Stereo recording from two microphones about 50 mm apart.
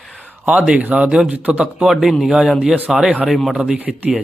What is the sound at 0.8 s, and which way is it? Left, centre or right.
Speech, right.